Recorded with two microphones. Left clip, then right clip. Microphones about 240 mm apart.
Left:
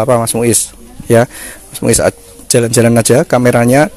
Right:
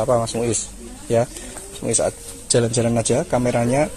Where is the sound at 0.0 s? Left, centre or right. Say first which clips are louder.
Left 8 dB; left.